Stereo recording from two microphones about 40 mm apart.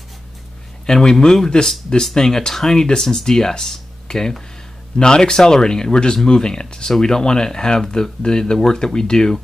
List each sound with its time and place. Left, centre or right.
0.8 s speech: centre